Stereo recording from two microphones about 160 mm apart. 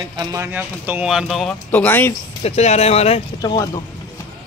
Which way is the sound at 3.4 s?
25° left (ahead or behind).